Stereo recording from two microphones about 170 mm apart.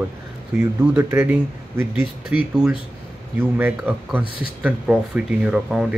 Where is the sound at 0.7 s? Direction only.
15° right (ahead or behind).